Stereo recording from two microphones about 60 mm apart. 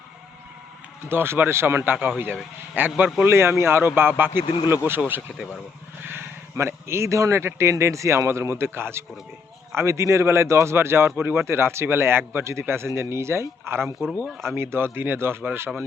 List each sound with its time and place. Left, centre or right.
1.0 s a man's voice: right